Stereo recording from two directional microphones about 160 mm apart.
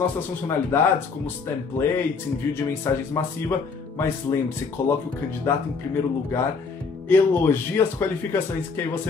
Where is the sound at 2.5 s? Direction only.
15° left (ahead or behind).